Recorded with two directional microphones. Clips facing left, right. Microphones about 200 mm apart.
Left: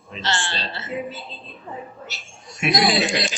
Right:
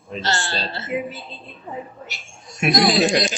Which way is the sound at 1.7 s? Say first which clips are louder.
Right 3 dB; 15° right (ahead or behind).